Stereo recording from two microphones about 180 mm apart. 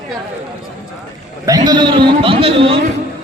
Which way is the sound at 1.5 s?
20° right (ahead or behind).